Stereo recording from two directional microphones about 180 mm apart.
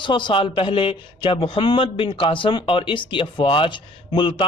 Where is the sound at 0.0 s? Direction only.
25° left (ahead or behind).